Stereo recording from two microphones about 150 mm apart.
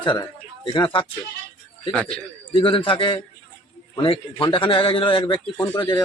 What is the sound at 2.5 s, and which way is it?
A man's voice, 35° left (ahead or behind).